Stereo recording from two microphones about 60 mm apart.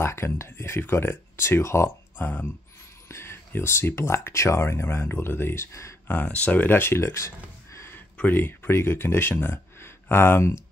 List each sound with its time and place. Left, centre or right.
0.0 s speech: left
2.1 s speech: left
3.1 s speech: left
5.7 s speech: left
6.0 s speech: left
8.3 s speech: left